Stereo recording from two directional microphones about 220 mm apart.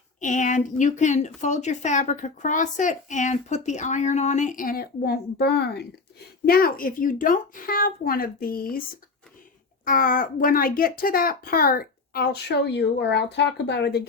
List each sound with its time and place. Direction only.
0.2 s speech: 35° left (ahead or behind)
9.8 s speech: 40° left (ahead or behind)